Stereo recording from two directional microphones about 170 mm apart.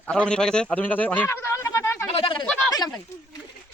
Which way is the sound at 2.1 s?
30° left (ahead or behind).